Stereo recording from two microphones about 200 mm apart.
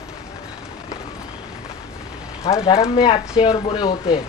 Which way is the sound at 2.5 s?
20° left (ahead or behind).